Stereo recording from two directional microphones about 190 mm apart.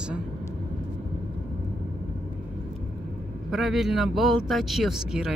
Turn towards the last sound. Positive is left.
turn(degrees=0)  # may be behind; listen again after turning